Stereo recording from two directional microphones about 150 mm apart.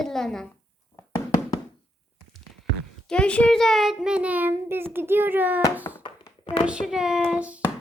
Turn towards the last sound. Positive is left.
turn(degrees=-10)  # may be behind; listen again after turning